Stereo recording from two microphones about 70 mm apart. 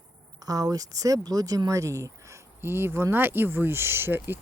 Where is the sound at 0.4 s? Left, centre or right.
Right.